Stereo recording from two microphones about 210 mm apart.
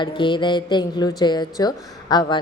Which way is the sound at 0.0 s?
20° left (ahead or behind).